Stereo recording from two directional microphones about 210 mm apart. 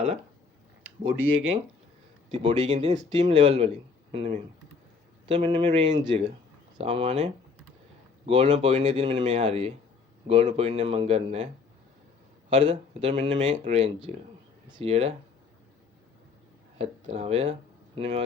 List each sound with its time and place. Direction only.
2.3 s speech: 25° right (ahead or behind)
8.3 s speech: 30° right (ahead or behind)
12.5 s speech: 25° right (ahead or behind)
16.7 s speech: 30° right (ahead or behind)